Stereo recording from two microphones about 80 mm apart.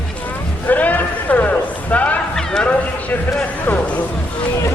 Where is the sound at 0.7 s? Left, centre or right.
Left.